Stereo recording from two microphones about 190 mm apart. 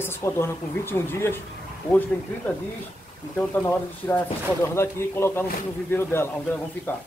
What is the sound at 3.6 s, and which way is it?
Speech, 5° left (ahead or behind).